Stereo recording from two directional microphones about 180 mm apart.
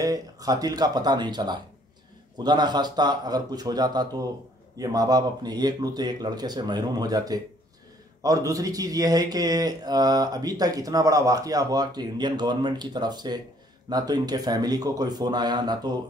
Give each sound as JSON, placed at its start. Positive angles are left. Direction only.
{"t": 0.0, "sound": "speech", "side_deg": -20}